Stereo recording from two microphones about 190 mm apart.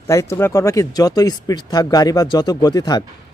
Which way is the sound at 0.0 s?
15° left (ahead or behind).